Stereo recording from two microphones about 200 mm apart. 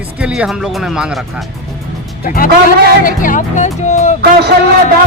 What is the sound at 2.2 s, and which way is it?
Speech, 45° left (ahead or behind).